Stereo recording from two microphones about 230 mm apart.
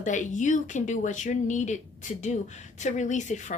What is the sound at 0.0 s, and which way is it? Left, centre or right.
A woman's voice, left.